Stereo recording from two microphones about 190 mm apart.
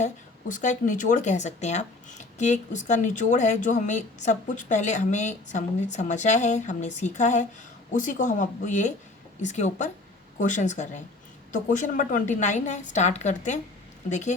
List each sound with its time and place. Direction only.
0.0 s speech: 40° left (ahead or behind)